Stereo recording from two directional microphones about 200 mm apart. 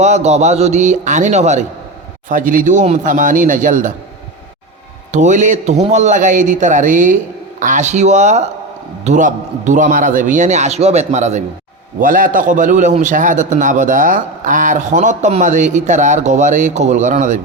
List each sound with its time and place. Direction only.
0.0 s a man's voice: 35° right (ahead or behind)
5.1 s a man's voice: 35° right (ahead or behind)